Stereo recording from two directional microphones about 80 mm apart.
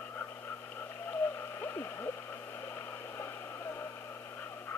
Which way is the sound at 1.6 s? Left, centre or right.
Left.